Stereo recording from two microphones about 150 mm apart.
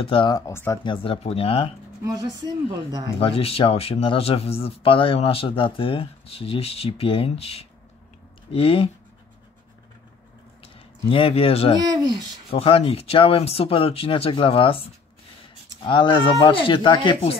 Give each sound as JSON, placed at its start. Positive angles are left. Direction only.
{"t": 0.0, "sound": "speech", "side_deg": 35}
{"t": 0.5, "sound": "speech", "side_deg": 15}
{"t": 0.8, "sound": "speech", "side_deg": 40}
{"t": 2.0, "sound": "speech", "side_deg": -25}
{"t": 3.2, "sound": "speech", "side_deg": 40}
{"t": 10.6, "sound": "a sound", "side_deg": 40}
{"t": 11.9, "sound": "speech", "side_deg": -25}
{"t": 12.4, "sound": "speech", "side_deg": 40}